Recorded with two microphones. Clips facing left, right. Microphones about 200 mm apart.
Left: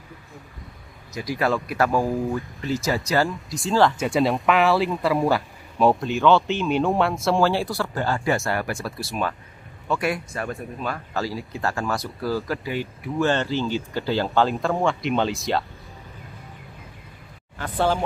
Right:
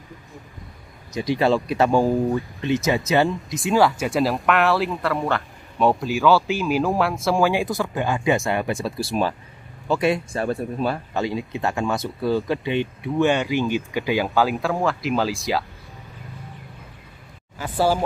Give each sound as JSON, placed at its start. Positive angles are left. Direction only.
{"t": 1.2, "sound": "speech", "side_deg": -25}
{"t": 3.7, "sound": "speech", "side_deg": -10}
{"t": 7.4, "sound": "speech", "side_deg": -15}
{"t": 11.1, "sound": "speech", "side_deg": -20}
{"t": 14.6, "sound": "speech", "side_deg": 0}
{"t": 17.6, "sound": "speech", "side_deg": -5}